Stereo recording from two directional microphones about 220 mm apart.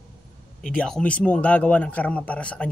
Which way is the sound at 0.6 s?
5° left (ahead or behind).